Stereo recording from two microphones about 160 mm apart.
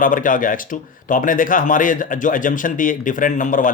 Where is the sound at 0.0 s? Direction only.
55° left (ahead or behind).